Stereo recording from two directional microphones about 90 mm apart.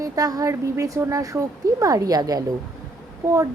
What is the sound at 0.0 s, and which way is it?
Speech, 40° right (ahead or behind).